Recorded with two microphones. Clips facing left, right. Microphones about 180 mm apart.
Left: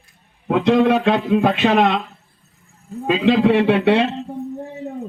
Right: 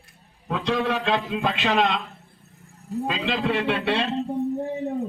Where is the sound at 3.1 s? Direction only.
55° left (ahead or behind).